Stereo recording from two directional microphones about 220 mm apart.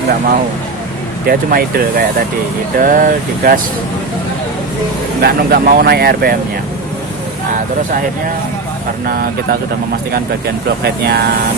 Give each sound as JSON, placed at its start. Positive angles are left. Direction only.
{"t": 1.3, "sound": "speech", "side_deg": -40}
{"t": 5.2, "sound": "speech", "side_deg": -45}
{"t": 9.0, "sound": "speech", "side_deg": -45}